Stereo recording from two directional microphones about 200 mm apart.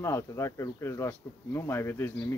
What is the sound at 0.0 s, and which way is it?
Speech, 15° left (ahead or behind).